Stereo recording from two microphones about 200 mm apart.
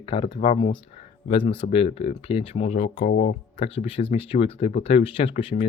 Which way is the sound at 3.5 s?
30° left (ahead or behind).